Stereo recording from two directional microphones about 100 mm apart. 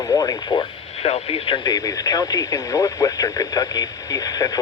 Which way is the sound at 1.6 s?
40° left (ahead or behind).